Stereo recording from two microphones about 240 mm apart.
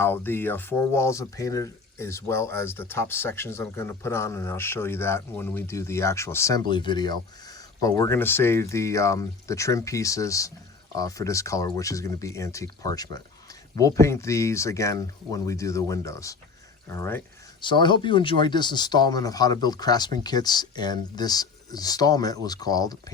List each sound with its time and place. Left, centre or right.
0.0 s speech: centre